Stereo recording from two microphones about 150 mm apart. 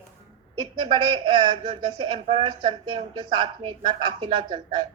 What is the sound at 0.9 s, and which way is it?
A woman's voice, 30° right (ahead or behind).